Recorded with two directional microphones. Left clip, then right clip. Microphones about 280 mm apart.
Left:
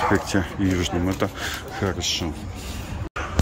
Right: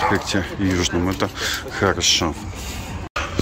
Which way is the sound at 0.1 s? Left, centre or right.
Centre.